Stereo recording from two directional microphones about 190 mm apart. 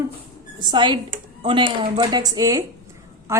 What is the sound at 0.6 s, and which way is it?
A man's voice, 25° right (ahead or behind).